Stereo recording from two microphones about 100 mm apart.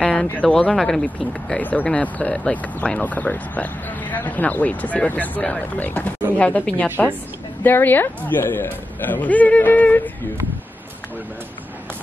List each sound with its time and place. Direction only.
0.0 s speech: 10° left (ahead or behind)